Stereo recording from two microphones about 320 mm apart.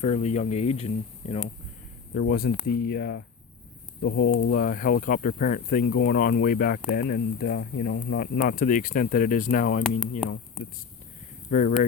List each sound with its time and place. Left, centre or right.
0.0 s speech: left
11.5 s speech: left